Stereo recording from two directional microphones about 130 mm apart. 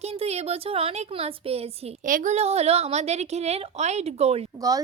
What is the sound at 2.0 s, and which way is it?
A woman's voice, 85° right.